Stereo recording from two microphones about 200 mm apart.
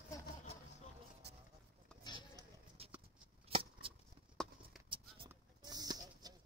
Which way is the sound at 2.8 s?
30° right (ahead or behind).